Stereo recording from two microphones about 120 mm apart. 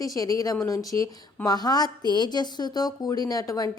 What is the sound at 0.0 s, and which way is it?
A woman's voice, 30° left (ahead or behind).